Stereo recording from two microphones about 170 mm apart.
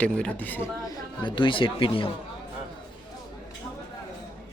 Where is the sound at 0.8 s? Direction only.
25° left (ahead or behind).